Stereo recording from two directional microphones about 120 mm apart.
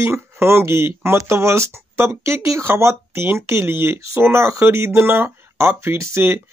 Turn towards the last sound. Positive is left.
turn(degrees=-20)  # may be behind; listen again after turning